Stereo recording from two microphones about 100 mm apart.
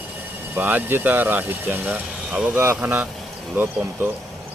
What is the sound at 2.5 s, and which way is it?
Speech, 25° right (ahead or behind).